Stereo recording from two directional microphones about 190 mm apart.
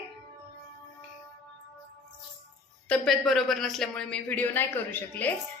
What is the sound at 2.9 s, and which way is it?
A woman's voice, centre (ahead or behind).